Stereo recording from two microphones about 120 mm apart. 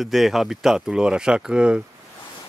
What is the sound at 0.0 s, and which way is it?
Speech, centre (ahead or behind).